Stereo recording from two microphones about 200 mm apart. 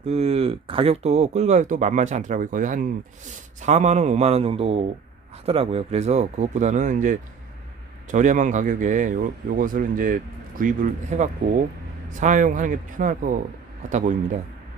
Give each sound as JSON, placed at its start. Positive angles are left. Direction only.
{"t": 0.0, "sound": "speech", "side_deg": -30}